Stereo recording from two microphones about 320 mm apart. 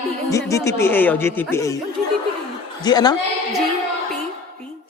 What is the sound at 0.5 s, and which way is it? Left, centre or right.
Speech, centre.